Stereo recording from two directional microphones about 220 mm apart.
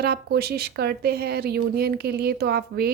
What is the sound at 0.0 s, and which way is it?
A woman's voice, 45° right (ahead or behind).